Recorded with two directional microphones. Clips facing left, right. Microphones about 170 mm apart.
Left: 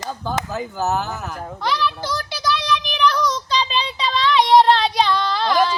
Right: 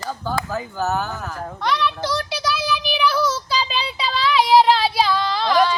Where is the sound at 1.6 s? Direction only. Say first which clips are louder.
Right 1 dB; centre (ahead or behind).